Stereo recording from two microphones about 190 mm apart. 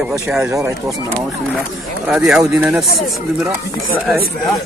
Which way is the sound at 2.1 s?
5° right (ahead or behind).